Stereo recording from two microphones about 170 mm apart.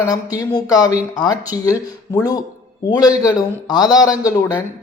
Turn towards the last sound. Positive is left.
turn(degrees=20)  # may be behind; listen again after turning